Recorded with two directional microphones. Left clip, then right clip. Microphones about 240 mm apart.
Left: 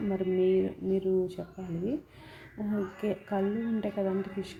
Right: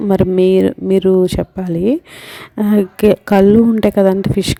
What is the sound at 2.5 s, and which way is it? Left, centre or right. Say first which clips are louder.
Speech: right 19 dB; right.